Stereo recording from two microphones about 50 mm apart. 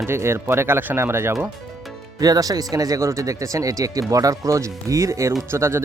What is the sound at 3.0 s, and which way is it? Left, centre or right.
Speech, right.